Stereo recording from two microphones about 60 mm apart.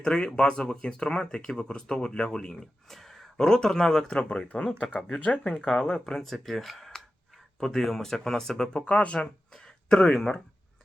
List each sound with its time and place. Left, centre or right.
0.0 s speech: centre